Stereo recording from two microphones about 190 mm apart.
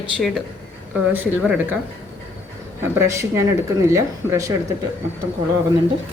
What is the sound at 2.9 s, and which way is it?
Speech, 15° right (ahead or behind).